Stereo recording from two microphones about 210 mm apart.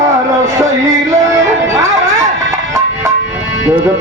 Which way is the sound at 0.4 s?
15° right (ahead or behind).